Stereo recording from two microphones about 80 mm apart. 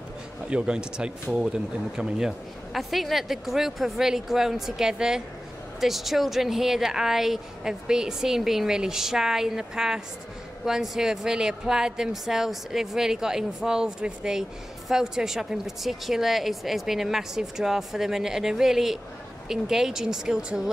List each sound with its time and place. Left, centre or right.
0.5 s a woman's voice: centre